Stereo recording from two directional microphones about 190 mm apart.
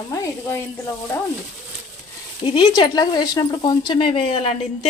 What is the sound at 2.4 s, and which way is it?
A woman's voice, 25° left (ahead or behind).